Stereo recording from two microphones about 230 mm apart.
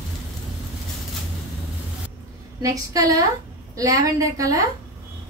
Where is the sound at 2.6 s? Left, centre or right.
Centre.